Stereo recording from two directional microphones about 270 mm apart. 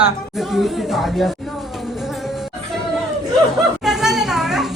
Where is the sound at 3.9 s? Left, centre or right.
Centre.